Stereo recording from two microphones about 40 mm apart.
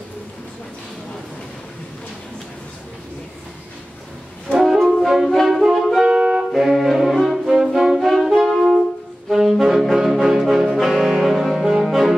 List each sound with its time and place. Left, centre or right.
4.5 s wind instrument: centre
4.8 s brass instrument: centre
5.5 s music: centre
6.0 s music: right
6.5 s music: centre
7.4 s brass instrument: centre
11.1 s music: centre